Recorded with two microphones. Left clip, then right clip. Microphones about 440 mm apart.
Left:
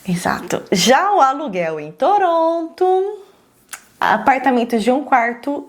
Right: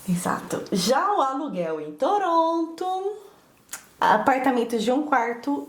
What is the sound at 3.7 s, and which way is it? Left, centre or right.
Speech, left.